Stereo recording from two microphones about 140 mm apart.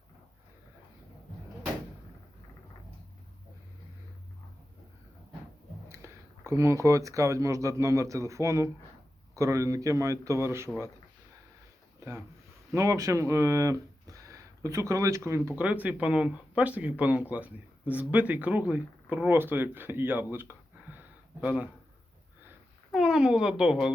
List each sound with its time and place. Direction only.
5.9 s a man's voice: 20° right (ahead or behind)
11.9 s a sound: 20° right (ahead or behind)
12.7 s a man's voice: 20° right (ahead or behind)
20.3 s a sound: 15° right (ahead or behind)
21.4 s speech: 10° right (ahead or behind)
22.9 s speech: 5° right (ahead or behind)